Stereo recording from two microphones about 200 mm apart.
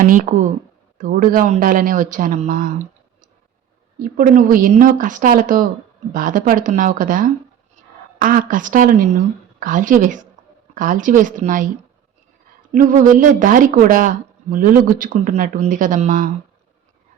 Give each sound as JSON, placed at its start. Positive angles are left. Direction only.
{"t": 0.0, "sound": "speech", "side_deg": -40}
{"t": 4.2, "sound": "speech", "side_deg": -45}
{"t": 10.4, "sound": "a sound", "side_deg": -40}
{"t": 10.8, "sound": "speech", "side_deg": -40}
{"t": 12.7, "sound": "speech", "side_deg": -40}